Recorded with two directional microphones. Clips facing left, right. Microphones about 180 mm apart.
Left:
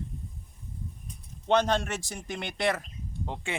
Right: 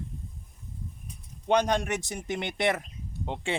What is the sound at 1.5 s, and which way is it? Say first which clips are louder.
Speech: even; 15° right (ahead or behind).